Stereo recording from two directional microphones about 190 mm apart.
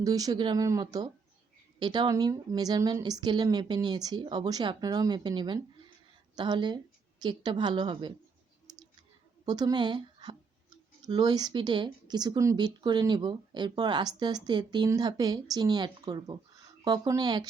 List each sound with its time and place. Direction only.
0.0 s speech: 20° right (ahead or behind)
9.5 s speech: 20° right (ahead or behind)